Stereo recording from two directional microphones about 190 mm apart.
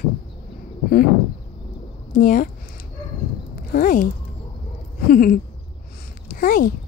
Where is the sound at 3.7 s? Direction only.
45° left (ahead or behind).